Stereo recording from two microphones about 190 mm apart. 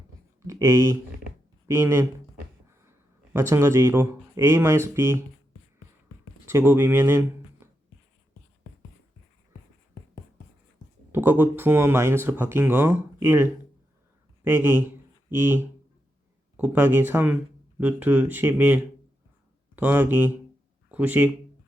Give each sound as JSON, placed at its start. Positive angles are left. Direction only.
{"t": 0.4, "sound": "speech", "side_deg": -15}
{"t": 3.3, "sound": "speech", "side_deg": -15}
{"t": 6.4, "sound": "speech", "side_deg": -10}
{"t": 11.1, "sound": "speech", "side_deg": -10}